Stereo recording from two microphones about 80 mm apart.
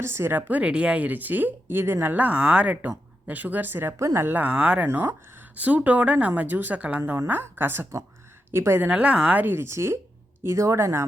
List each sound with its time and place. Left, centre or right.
0.0 s a woman's voice: right
3.9 s a woman's voice: right
8.8 s speech: centre
9.4 s speech: right